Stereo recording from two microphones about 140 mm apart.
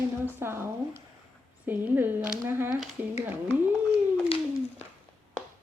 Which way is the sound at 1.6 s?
15° right (ahead or behind).